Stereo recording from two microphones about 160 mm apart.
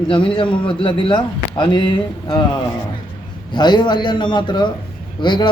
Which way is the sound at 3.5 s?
30° left (ahead or behind).